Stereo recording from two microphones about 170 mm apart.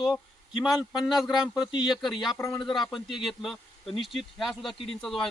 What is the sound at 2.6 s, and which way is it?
Speech, centre (ahead or behind).